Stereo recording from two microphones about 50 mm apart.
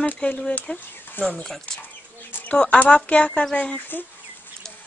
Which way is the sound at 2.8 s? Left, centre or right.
Left.